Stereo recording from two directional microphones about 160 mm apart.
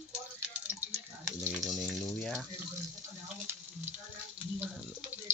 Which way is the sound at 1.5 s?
Centre (ahead or behind).